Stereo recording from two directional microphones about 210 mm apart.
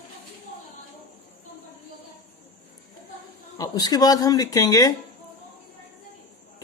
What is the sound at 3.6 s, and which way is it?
Speech, 20° left (ahead or behind).